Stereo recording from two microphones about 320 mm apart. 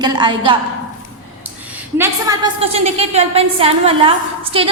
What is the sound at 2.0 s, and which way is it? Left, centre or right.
A woman's voice, centre.